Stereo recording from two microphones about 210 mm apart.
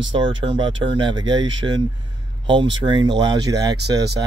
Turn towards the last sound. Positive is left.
turn(degrees=-20)  # may be behind; listen again after turning